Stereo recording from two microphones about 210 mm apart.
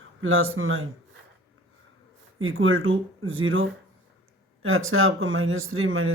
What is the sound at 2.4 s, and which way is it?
Speech, 75° right (ahead or behind).